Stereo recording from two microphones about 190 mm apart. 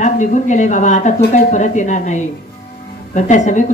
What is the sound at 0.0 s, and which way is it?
Speech, 40° left (ahead or behind).